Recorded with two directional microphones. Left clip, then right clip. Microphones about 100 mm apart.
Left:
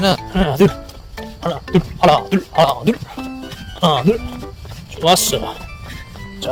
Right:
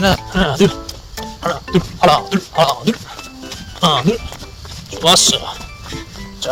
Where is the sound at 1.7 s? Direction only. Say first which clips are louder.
Even; 35° left (ahead or behind); by 4.2 s 55° left (ahead or behind).